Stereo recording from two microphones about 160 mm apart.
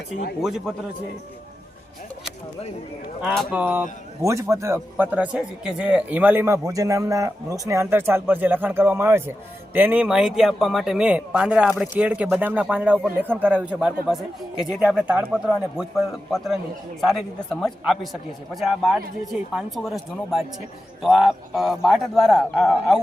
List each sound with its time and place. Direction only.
0.4 s speech: centre (ahead or behind)
3.2 s speech: 5° right (ahead or behind)